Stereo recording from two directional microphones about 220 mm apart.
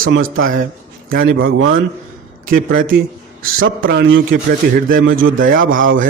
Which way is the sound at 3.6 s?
55° right (ahead or behind).